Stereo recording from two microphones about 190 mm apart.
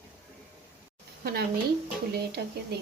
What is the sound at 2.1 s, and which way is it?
Speech, 60° right (ahead or behind).